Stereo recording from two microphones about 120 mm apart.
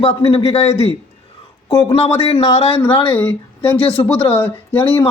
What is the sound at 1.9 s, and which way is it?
Speech, 60° left (ahead or behind).